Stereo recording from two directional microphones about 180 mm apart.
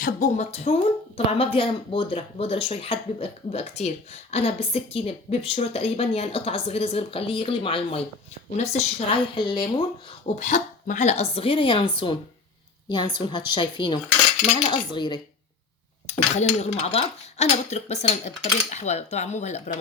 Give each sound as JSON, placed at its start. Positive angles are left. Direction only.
{"t": 0.0, "sound": "speech", "side_deg": 40}
{"t": 10.3, "sound": "a woman's voice", "side_deg": 40}
{"t": 16.0, "sound": "speech", "side_deg": 40}